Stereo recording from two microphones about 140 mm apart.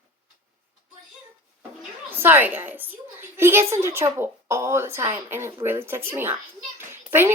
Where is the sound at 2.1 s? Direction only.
15° right (ahead or behind).